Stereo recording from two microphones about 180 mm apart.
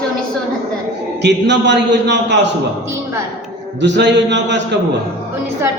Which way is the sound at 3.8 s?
75° right (ahead or behind).